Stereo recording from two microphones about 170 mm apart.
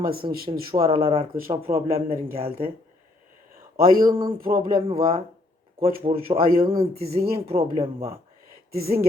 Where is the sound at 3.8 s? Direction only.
60° right (ahead or behind).